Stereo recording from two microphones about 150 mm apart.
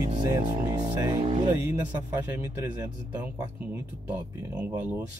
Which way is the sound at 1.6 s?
15° right (ahead or behind).